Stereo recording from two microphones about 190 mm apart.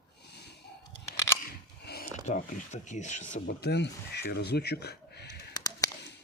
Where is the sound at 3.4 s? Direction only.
60° left (ahead or behind).